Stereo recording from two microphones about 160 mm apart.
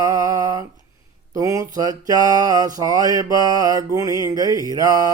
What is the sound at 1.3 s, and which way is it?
Mantra, 20° right (ahead or behind).